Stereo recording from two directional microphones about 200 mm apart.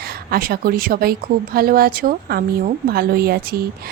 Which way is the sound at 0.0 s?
50° right (ahead or behind).